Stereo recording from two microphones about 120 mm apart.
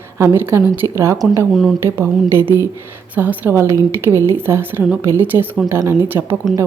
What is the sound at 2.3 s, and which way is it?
A woman's voice, 20° right (ahead or behind).